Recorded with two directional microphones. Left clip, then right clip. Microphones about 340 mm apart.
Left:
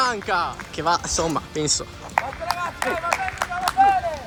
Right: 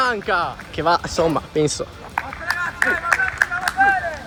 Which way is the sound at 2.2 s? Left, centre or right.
Centre.